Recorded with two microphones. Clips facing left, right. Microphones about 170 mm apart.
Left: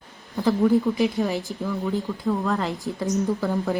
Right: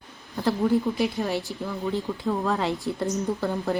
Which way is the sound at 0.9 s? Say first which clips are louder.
Left 3 dB; centre (ahead or behind).